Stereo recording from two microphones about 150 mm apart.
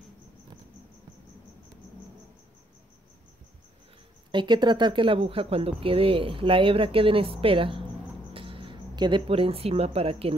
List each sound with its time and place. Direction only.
4.3 s speech: 30° right (ahead or behind)